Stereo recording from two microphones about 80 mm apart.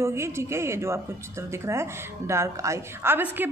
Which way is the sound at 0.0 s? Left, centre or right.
Right.